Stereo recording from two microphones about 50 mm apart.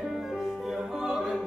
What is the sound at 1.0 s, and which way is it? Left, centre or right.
Opera, centre.